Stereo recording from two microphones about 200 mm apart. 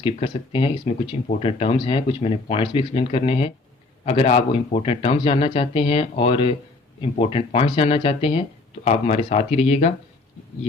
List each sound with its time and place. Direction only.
0.0 s speech: 25° left (ahead or behind)